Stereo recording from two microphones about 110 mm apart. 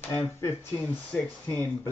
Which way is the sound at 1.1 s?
15° left (ahead or behind).